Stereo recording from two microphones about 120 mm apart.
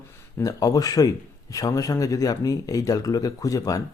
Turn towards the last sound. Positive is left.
turn(degrees=30)  # may be behind; listen again after turning